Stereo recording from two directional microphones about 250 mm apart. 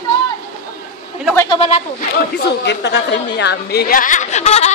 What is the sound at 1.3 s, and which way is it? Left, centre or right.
Speech, centre.